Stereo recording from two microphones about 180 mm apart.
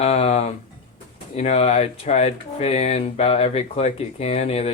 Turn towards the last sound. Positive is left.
turn(degrees=35)  # may be behind; listen again after turning